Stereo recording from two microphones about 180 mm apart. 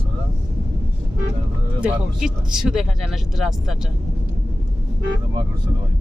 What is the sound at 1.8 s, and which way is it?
Speech, 5° right (ahead or behind).